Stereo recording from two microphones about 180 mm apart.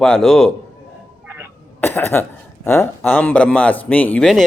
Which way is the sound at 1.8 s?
10° left (ahead or behind).